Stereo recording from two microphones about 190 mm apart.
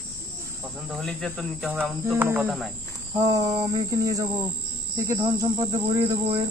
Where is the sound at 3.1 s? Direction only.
15° right (ahead or behind).